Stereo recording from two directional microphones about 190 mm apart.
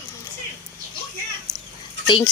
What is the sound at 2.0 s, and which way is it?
Speech, 25° left (ahead or behind).